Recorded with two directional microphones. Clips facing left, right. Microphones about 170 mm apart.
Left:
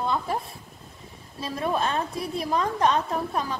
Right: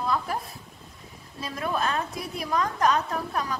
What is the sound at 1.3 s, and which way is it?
A woman's voice, 30° left (ahead or behind).